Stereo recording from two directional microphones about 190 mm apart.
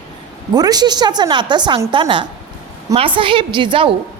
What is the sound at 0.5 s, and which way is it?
A woman's voice, 20° right (ahead or behind).